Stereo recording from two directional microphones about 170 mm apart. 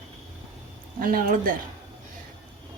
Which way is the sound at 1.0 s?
55° right (ahead or behind).